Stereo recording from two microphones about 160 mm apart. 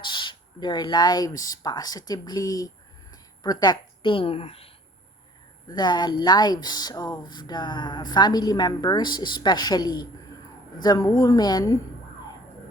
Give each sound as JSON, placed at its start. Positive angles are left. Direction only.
{"t": 0.0, "sound": "speech", "side_deg": 30}
{"t": 5.6, "sound": "speech", "side_deg": 25}